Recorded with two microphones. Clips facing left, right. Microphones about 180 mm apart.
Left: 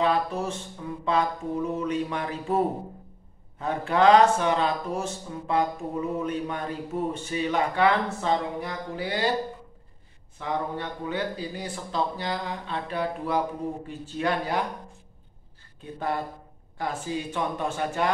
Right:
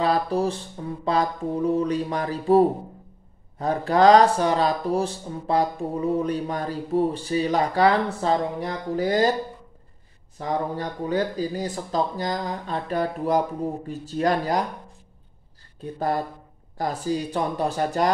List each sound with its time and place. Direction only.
0.0 s speech: 35° right (ahead or behind)
10.4 s speech: 40° right (ahead or behind)
15.8 s speech: 40° right (ahead or behind)